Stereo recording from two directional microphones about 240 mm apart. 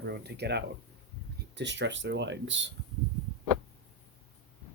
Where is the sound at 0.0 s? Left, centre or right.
Right.